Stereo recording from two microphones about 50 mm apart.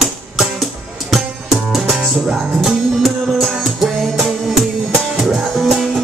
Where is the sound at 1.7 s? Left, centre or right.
Centre.